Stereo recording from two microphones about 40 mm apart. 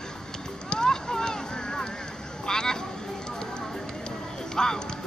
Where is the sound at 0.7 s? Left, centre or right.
Centre.